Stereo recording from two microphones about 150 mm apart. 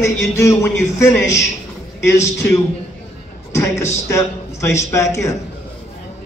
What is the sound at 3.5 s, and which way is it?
A man's voice, 20° left (ahead or behind).